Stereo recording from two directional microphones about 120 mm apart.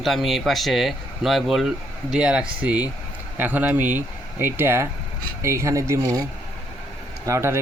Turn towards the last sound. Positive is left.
turn(degrees=-20)  # may be behind; listen again after turning